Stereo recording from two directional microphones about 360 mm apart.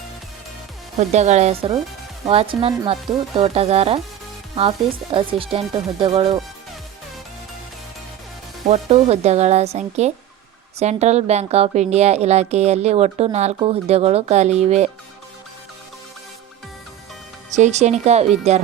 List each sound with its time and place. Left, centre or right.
0.9 s speech: centre
8.6 s speech: centre
17.5 s speech: centre